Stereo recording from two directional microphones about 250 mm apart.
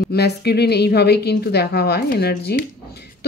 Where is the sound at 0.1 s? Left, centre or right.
Left.